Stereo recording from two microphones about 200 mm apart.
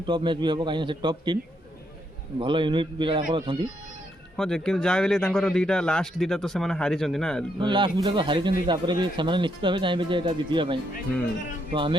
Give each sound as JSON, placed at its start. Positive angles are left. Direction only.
{"t": 0.0, "sound": "a man's voice", "side_deg": -25}
{"t": 2.4, "sound": "a man's voice", "side_deg": -25}
{"t": 4.4, "sound": "speech", "side_deg": 5}
{"t": 7.6, "sound": "a man's voice", "side_deg": -25}